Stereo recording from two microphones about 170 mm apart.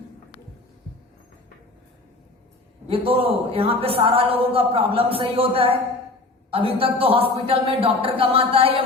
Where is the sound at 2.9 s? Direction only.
35° right (ahead or behind).